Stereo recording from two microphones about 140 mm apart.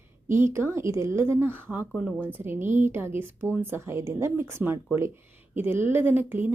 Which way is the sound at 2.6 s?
60° right (ahead or behind).